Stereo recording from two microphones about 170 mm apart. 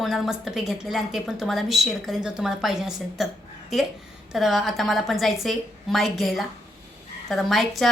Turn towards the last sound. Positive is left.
turn(degrees=0)  # may be behind; listen again after turning